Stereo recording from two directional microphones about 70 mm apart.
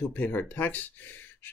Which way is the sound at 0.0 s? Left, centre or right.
Left.